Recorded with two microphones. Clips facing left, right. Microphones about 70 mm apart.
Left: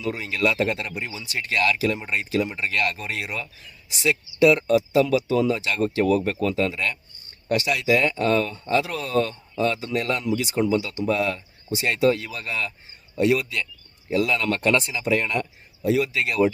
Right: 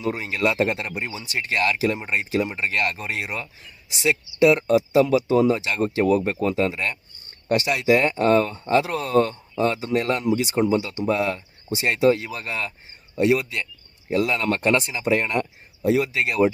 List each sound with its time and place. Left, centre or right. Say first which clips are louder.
0.0 s speech: right 1 dB; right